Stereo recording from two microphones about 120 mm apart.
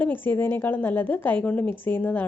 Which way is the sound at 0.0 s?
15° left (ahead or behind).